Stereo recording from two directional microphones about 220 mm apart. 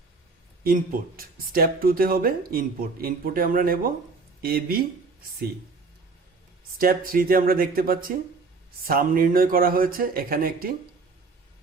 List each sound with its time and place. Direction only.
0.6 s speech: 40° right (ahead or behind)
6.7 s speech: 40° right (ahead or behind)